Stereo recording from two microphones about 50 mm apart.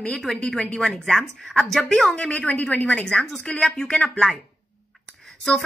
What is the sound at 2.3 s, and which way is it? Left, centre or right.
Speech, left.